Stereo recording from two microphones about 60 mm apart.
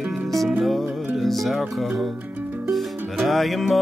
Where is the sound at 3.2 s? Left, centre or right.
Centre.